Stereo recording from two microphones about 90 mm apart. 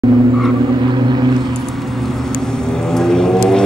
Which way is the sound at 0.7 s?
60° right (ahead or behind).